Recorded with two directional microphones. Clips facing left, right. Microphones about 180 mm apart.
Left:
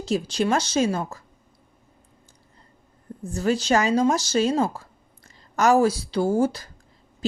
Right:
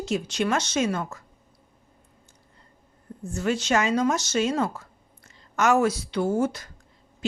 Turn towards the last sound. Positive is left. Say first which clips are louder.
# left 3 dB
turn(degrees=30)  # may be behind; listen again after turning